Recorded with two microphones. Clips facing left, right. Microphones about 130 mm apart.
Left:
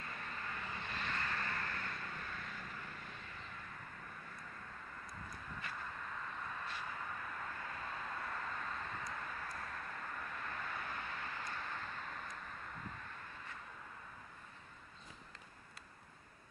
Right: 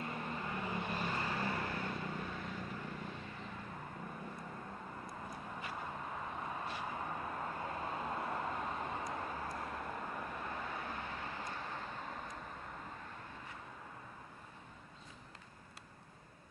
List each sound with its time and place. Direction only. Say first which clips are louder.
0.0 s vehicle: right 6 dB; 25° right (ahead or behind)
5.6 s vehicle: right 2 dB; 15° right (ahead or behind)
5.9 s vehicle: right 4 dB; 25° right (ahead or behind)